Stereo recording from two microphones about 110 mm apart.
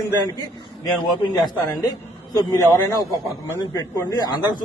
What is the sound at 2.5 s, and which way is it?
A man's voice, 35° left (ahead or behind).